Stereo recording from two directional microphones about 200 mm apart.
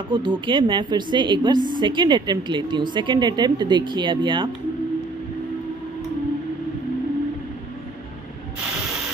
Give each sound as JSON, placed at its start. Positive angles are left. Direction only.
{"t": 0.1, "sound": "a woman's voice", "side_deg": -25}